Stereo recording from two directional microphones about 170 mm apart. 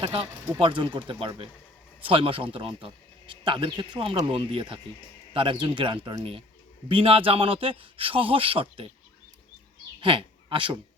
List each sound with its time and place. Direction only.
0.0 s a man's voice: 35° right (ahead or behind)
10.0 s speech: 30° right (ahead or behind)